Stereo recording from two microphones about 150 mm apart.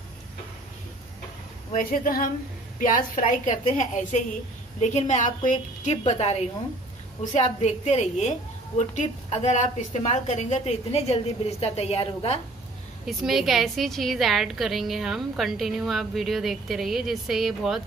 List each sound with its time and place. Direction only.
1.7 s speech: 70° left (ahead or behind)
3.2 s a woman's voice: 60° left (ahead or behind); by 12.4 s 40° left (ahead or behind)
13.0 s a woman's voice: centre (ahead or behind)